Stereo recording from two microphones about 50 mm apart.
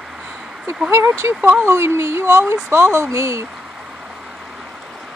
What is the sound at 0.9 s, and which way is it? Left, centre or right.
Speech, right.